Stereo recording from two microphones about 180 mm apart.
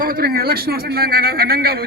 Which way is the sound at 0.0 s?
55° right (ahead or behind).